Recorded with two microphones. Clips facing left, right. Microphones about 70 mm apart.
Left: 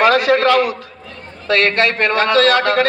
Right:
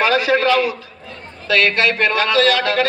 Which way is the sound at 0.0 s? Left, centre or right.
Left.